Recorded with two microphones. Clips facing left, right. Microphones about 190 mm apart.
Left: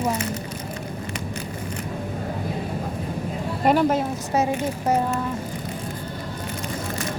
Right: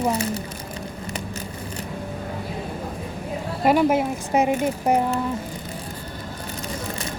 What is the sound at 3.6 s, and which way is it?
A woman's voice, 10° right (ahead or behind).